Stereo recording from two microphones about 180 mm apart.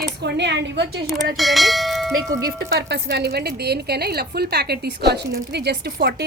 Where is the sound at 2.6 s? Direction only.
70° right (ahead or behind).